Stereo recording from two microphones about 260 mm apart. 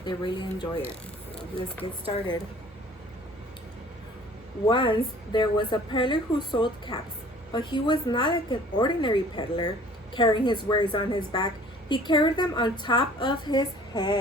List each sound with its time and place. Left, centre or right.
0.0 s a woman's voice: centre
1.8 s speech: centre
4.7 s a woman's voice: centre